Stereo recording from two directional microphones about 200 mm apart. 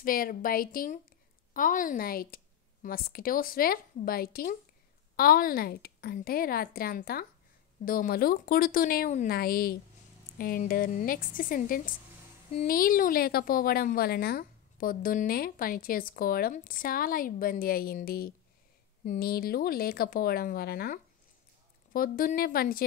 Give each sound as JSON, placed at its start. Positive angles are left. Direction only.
{"t": 0.0, "sound": "a woman's voice", "side_deg": 45}